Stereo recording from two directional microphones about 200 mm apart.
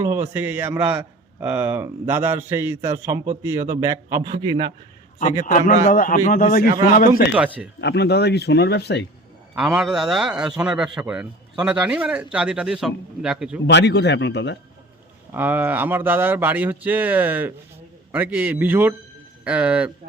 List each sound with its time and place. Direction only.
0.0 s a man's voice: 15° right (ahead or behind)
5.5 s a man's voice: 40° left (ahead or behind)
7.3 s a man's voice: 5° right (ahead or behind)
7.8 s speech: 60° left (ahead or behind)
9.6 s a man's voice: centre (ahead or behind)
13.7 s speech: 60° left (ahead or behind)
15.3 s a man's voice: 10° right (ahead or behind)